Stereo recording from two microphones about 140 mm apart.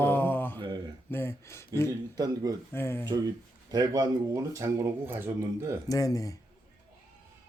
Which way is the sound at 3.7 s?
25° right (ahead or behind).